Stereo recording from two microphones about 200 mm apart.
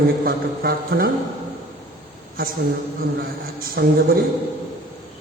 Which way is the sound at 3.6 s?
50° right (ahead or behind).